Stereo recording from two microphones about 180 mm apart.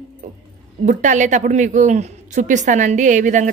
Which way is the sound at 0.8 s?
45° right (ahead or behind).